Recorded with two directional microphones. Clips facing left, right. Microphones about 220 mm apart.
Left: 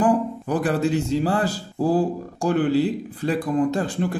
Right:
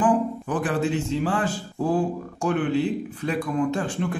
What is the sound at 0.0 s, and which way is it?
Speech, 40° left (ahead or behind).